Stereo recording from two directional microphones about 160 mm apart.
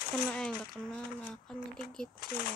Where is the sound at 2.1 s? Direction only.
70° left (ahead or behind).